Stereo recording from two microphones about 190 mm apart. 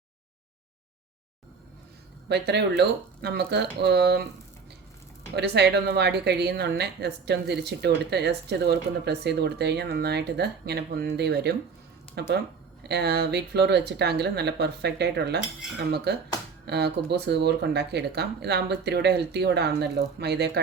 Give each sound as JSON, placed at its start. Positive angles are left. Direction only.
{"t": 2.3, "sound": "a woman's voice", "side_deg": -60}
{"t": 5.3, "sound": "a woman's voice", "side_deg": -65}